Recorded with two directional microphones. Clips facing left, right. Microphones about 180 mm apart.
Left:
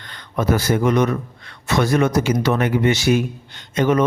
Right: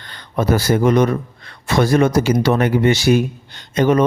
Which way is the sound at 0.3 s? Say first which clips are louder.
Right 2 dB; 35° right (ahead or behind).